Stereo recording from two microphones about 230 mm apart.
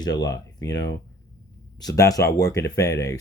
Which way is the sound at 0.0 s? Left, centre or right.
Centre.